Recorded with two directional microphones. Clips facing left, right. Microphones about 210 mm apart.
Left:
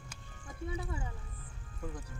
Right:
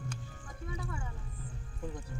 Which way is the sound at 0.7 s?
25° left (ahead or behind).